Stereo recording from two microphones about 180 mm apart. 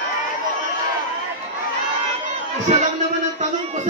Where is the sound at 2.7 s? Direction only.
40° right (ahead or behind).